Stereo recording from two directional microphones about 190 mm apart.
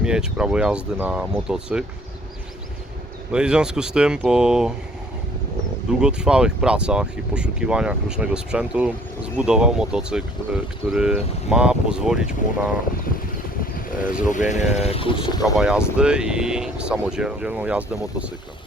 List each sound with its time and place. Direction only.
0.0 s speech: 5° right (ahead or behind)
3.3 s speech: 5° right (ahead or behind)
6.0 s speech: 5° right (ahead or behind)
13.7 s vehicle: 45° left (ahead or behind)
14.3 s speech: 40° left (ahead or behind)
14.8 s speech: 30° left (ahead or behind)
15.5 s speech: 5° right (ahead or behind)